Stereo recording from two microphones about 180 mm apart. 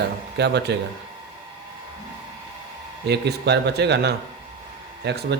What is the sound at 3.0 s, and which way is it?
Speech, 65° right (ahead or behind).